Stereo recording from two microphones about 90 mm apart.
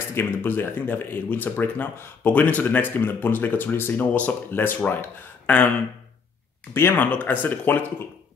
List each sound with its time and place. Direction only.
0.1 s speech: 25° left (ahead or behind)
6.7 s speech: 25° left (ahead or behind)